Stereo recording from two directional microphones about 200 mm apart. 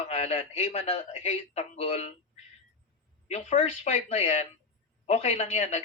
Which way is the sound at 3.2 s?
30° left (ahead or behind).